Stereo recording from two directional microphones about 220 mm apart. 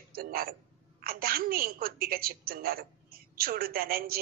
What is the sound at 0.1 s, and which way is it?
A woman's voice, 40° right (ahead or behind).